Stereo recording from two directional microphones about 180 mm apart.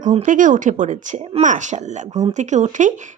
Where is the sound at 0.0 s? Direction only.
45° right (ahead or behind).